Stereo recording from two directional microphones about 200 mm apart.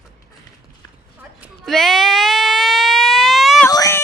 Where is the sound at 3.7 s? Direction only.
15° left (ahead or behind).